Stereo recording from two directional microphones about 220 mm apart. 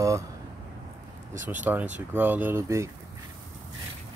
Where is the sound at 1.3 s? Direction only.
35° right (ahead or behind).